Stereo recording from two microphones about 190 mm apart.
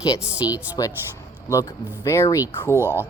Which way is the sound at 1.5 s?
15° left (ahead or behind).